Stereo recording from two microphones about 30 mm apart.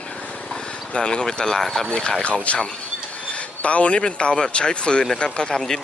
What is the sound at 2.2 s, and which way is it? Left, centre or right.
Speech, left.